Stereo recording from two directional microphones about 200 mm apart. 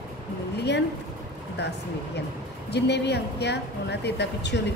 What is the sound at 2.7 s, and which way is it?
Speech, 55° left (ahead or behind).